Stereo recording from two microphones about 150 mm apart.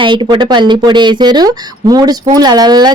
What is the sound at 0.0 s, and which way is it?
A woman's voice, 30° right (ahead or behind).